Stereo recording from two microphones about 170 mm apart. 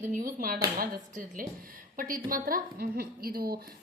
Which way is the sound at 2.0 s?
55° right (ahead or behind).